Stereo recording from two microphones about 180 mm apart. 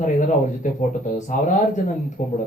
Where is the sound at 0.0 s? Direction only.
45° left (ahead or behind).